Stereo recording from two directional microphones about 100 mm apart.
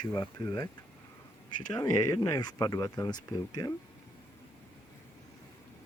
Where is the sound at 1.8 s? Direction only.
35° left (ahead or behind).